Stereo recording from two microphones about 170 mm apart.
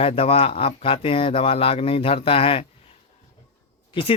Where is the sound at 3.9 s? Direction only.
30° left (ahead or behind).